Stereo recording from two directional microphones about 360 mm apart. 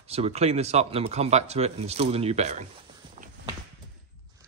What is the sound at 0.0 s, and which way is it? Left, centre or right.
Speech, centre.